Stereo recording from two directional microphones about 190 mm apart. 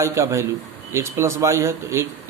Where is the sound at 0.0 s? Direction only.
15° right (ahead or behind).